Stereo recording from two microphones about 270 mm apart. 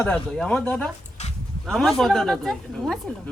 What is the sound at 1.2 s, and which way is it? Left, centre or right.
Sheep, left.